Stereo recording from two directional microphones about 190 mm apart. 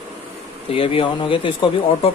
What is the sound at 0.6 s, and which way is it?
Speech, 30° left (ahead or behind).